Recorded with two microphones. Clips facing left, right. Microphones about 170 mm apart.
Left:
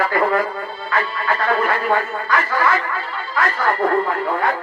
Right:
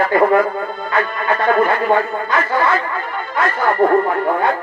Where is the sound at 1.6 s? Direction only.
25° right (ahead or behind).